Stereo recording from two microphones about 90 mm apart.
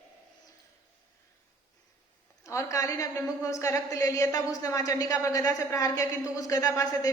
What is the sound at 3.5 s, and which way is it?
A woman's voice, 35° left (ahead or behind).